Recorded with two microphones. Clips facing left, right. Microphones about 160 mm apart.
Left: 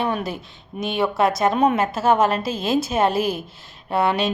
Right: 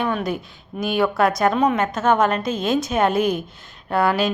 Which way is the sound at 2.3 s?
5° left (ahead or behind).